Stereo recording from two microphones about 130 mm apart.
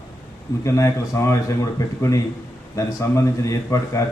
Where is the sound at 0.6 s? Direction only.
20° left (ahead or behind).